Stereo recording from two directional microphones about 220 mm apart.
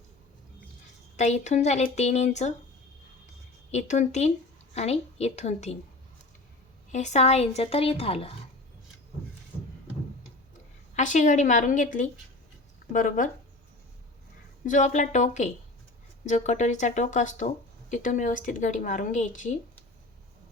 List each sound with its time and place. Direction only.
1.1 s speech: 30° left (ahead or behind)
3.7 s a woman's voice: 30° left (ahead or behind)
6.9 s a woman's voice: 30° left (ahead or behind)
10.9 s speech: 35° left (ahead or behind)
14.6 s speech: 35° left (ahead or behind)